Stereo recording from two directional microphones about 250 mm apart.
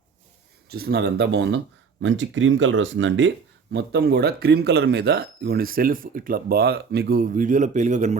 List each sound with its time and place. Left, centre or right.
0.7 s speech: right